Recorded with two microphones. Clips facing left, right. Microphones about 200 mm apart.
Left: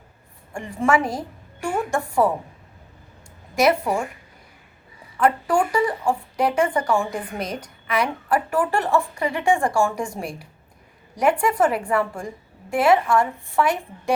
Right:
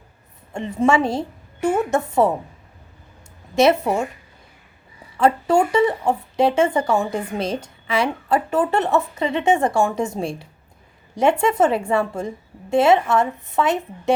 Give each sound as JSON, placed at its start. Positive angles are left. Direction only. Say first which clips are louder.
{"t": 0.5, "sound": "speech", "louder": "right 3 dB", "side_deg": -20}
{"t": 3.5, "sound": "speech", "louder": "right 3 dB", "side_deg": -25}
{"t": 5.1, "sound": "speech", "louder": "right 3 dB", "side_deg": -25}